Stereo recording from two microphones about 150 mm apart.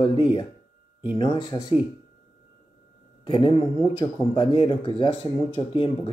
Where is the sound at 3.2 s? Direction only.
35° left (ahead or behind).